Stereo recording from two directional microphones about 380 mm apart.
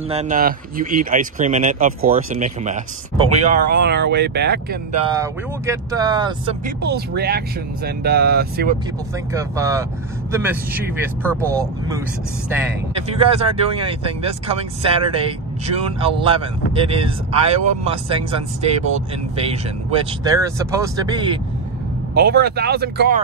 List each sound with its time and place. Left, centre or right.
0.1 s speech: centre
5.1 s speech: centre
6.8 s speech: right
9.3 s speech: centre
13.2 s speech: centre
22.1 s speech: right